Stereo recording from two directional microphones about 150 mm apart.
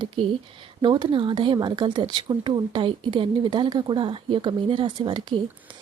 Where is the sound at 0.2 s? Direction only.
35° right (ahead or behind).